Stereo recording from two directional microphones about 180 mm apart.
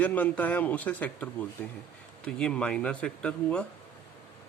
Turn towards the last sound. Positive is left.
turn(degrees=5)  # may be behind; listen again after turning